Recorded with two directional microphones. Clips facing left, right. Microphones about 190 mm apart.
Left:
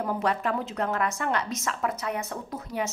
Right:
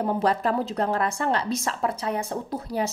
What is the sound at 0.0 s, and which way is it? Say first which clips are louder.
A woman's voice: right 4 dB; 30° right (ahead or behind).